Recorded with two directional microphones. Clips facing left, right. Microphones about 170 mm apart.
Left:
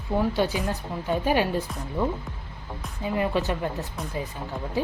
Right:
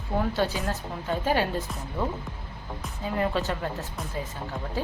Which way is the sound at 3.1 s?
15° left (ahead or behind).